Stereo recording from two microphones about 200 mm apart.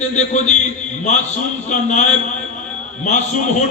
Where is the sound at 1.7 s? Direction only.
35° left (ahead or behind).